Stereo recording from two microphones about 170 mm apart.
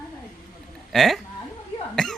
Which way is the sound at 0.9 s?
Centre (ahead or behind).